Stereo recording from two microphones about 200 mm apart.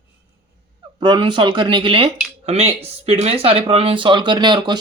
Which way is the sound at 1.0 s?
20° right (ahead or behind).